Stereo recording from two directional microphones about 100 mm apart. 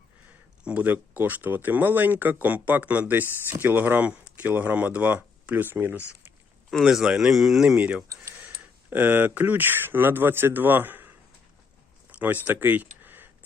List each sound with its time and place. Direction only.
0.6 s speech: 15° right (ahead or behind)
6.7 s speech: centre (ahead or behind)
7.8 s speech: 15° right (ahead or behind)
12.1 s a sound: 15° right (ahead or behind)
12.5 s speech: 15° right (ahead or behind)